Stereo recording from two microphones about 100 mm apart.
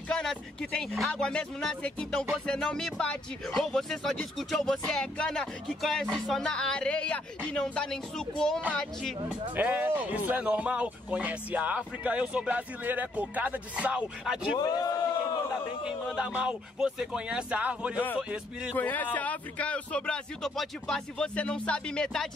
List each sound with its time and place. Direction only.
0.1 s speech: 5° left (ahead or behind)
9.6 s speech: 20° right (ahead or behind)
14.6 s a man's voice: 40° left (ahead or behind)
16.2 s speech: 10° right (ahead or behind)
18.8 s speech: 15° left (ahead or behind)